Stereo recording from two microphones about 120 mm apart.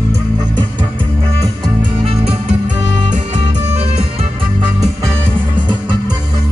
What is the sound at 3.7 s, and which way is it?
Music, 60° right (ahead or behind).